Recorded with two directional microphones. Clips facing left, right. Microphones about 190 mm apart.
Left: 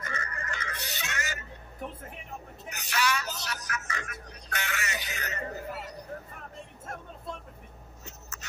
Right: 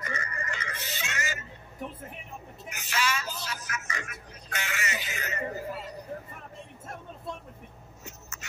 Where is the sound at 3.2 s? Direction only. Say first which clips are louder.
Even; 70° left (ahead or behind).